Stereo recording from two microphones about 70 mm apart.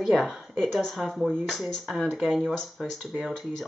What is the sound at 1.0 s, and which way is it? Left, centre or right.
Speech, centre.